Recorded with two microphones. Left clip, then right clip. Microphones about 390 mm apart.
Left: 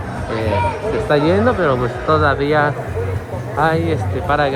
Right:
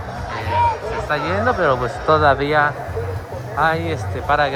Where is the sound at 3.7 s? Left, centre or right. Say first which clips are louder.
Left 4 dB; right.